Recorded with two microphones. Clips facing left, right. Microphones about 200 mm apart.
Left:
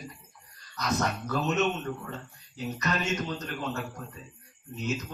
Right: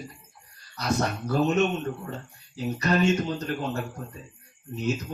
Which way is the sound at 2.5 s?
30° right (ahead or behind).